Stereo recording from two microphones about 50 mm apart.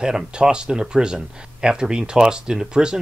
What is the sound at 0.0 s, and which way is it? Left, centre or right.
Speech, centre.